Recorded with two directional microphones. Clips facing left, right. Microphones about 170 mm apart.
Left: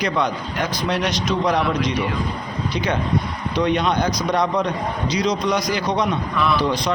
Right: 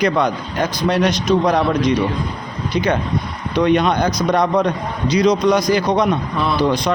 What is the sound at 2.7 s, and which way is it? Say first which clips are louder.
A man's voice: right 4 dB; 50° right (ahead or behind).